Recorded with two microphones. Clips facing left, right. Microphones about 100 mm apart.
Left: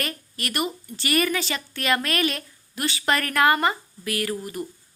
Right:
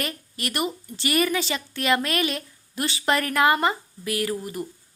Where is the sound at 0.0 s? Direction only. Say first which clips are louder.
Right 1 dB; 15° right (ahead or behind).